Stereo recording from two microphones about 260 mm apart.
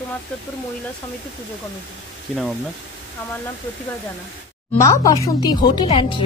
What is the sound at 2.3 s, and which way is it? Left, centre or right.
Speech, centre.